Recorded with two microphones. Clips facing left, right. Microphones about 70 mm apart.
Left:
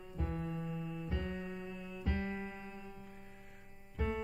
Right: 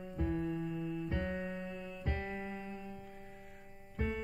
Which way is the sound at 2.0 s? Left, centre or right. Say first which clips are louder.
Left 2 dB; right.